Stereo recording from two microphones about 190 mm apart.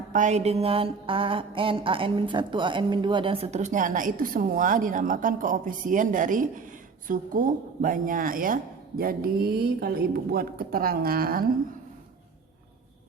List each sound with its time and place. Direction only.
0.1 s mantra: 40° right (ahead or behind)
7.1 s speech: 45° right (ahead or behind)